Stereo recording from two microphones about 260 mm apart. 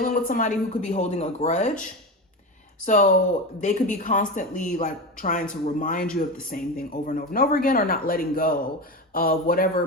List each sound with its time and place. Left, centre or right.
0.0 s speech: left
2.8 s speech: left